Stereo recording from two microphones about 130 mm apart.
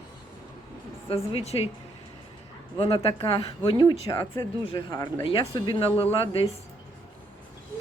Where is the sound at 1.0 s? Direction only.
45° left (ahead or behind).